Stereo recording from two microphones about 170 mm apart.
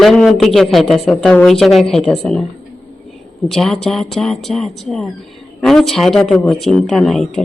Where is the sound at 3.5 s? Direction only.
Centre (ahead or behind).